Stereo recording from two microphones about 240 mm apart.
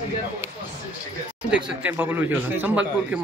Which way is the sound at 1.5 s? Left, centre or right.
Centre.